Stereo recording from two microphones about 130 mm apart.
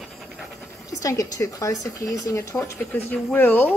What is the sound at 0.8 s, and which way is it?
Speech, 25° left (ahead or behind).